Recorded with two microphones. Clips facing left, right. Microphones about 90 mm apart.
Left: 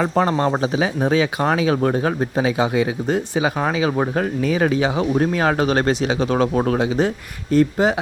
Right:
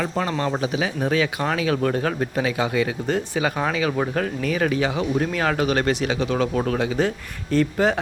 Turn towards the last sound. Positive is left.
turn(degrees=15)  # may be behind; listen again after turning